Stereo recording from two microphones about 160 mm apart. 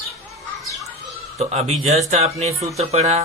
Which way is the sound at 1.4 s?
40° right (ahead or behind).